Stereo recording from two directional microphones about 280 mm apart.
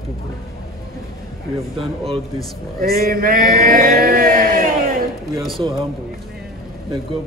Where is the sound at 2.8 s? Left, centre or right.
Right.